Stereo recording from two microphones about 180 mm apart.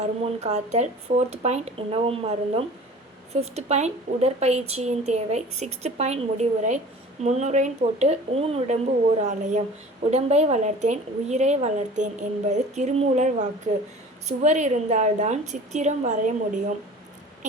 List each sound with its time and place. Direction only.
0.0 s a woman's voice: 40° right (ahead or behind)